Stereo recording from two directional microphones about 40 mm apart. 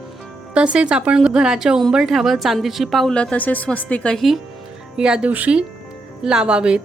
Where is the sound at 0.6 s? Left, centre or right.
Right; by 3.1 s centre.